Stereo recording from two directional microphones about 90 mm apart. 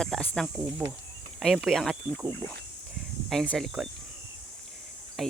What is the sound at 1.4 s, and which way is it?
Speech, 5° left (ahead or behind).